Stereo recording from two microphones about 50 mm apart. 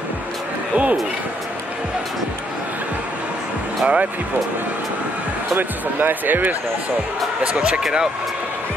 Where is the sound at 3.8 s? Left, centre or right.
Right.